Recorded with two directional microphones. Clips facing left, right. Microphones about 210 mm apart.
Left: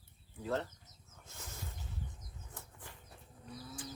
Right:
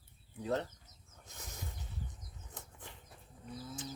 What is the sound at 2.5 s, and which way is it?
Bird flight, 20° right (ahead or behind).